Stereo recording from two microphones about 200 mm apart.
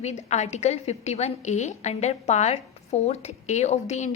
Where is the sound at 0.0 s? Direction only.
35° left (ahead or behind).